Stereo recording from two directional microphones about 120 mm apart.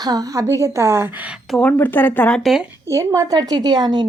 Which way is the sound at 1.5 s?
10° left (ahead or behind).